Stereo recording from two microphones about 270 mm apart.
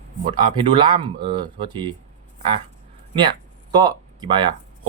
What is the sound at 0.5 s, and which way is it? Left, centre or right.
Speech, centre.